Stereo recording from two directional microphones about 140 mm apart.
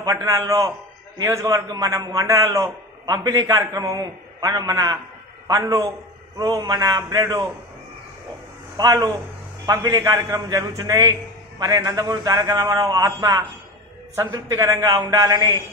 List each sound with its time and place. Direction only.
0.0 s a man's voice: 25° right (ahead or behind)
8.7 s a man's voice: 30° right (ahead or behind)